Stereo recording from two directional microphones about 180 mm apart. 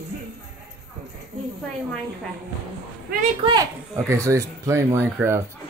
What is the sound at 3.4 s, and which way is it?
Speech, 20° right (ahead or behind).